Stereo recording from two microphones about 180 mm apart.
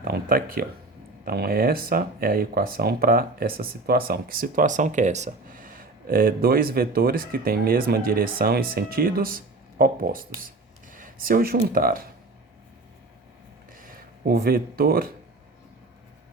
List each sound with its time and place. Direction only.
0.0 s speech: 55° right (ahead or behind)
13.7 s speech: 50° right (ahead or behind)